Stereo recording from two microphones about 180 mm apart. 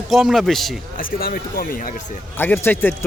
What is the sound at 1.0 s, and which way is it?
Speech, 55° left (ahead or behind).